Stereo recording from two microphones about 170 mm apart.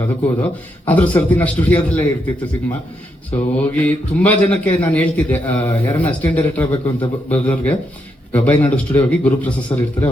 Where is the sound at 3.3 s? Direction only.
10° left (ahead or behind).